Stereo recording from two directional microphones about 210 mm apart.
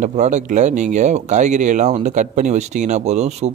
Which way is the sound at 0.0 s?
35° right (ahead or behind).